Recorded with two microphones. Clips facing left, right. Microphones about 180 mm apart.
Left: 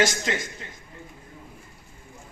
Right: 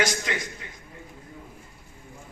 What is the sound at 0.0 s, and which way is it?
Speech, 25° left (ahead or behind).